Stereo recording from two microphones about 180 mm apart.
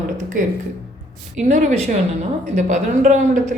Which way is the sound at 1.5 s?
40° right (ahead or behind).